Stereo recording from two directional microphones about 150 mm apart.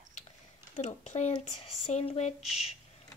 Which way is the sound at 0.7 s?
50° left (ahead or behind).